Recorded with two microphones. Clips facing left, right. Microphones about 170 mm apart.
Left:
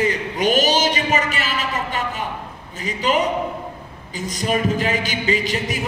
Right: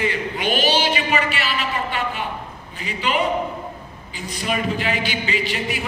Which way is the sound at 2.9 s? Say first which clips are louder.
Left 2 dB; 40° left (ahead or behind).